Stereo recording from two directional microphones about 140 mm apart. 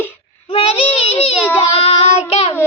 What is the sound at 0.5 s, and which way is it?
Child singing, 45° left (ahead or behind).